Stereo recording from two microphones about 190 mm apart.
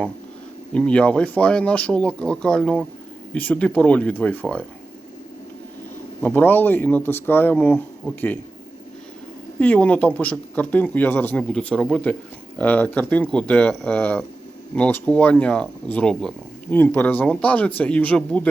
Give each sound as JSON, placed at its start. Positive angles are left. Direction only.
{"t": 0.7, "sound": "speech", "side_deg": 5}
{"t": 6.2, "sound": "speech", "side_deg": 10}
{"t": 9.6, "sound": "speech", "side_deg": 5}